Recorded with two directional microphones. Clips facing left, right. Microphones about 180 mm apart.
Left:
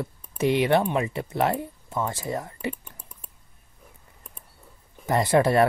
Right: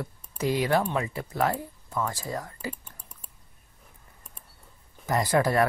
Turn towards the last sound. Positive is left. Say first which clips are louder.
# left 4 dB
turn(degrees=25)  # may be behind; listen again after turning